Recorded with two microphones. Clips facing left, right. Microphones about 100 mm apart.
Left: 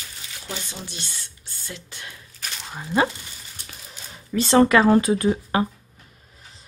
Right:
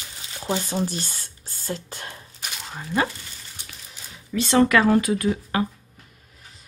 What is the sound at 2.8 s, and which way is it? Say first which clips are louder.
Speech: left 3 dB; 20° left (ahead or behind).